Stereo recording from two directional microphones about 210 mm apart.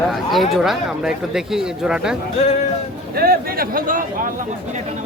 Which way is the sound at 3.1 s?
45° right (ahead or behind).